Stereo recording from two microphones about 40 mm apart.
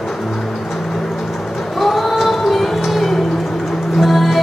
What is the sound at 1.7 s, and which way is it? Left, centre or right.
Female singing, centre.